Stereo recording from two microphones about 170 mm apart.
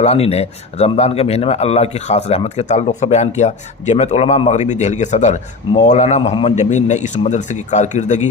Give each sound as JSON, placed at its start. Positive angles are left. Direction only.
{"t": 0.0, "sound": "speech", "side_deg": 35}